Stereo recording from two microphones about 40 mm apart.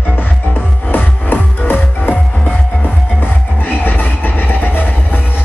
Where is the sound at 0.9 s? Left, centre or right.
Left.